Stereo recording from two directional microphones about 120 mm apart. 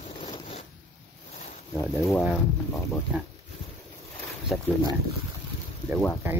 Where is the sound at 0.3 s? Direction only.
60° left (ahead or behind).